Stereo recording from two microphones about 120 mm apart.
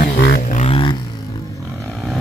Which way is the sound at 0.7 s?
50° left (ahead or behind).